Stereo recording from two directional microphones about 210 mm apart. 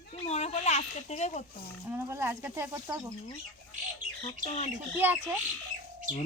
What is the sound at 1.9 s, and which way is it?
Speech, 10° right (ahead or behind).